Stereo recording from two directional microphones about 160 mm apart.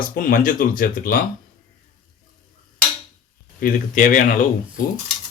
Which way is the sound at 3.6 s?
55° left (ahead or behind).